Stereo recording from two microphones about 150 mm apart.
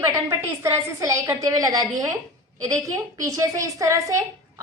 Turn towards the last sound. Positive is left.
turn(degrees=-20)  # may be behind; listen again after turning